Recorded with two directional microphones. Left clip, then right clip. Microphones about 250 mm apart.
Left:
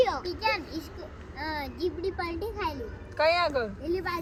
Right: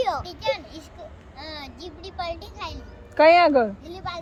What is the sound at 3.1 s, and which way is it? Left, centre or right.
Speech, right.